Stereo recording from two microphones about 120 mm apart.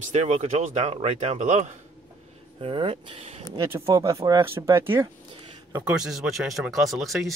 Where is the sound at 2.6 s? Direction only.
45° right (ahead or behind).